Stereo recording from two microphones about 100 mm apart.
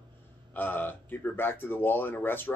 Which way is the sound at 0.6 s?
20° left (ahead or behind).